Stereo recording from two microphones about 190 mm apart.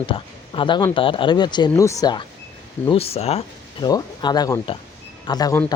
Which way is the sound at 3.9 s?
20° left (ahead or behind).